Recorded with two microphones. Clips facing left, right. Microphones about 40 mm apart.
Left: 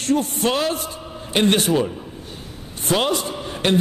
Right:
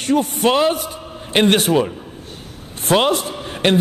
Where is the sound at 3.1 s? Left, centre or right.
Right.